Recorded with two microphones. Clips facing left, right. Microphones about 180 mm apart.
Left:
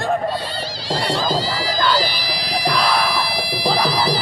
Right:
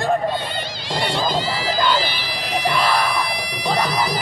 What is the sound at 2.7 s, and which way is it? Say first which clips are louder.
Music: left 1 dB; 5° left (ahead or behind).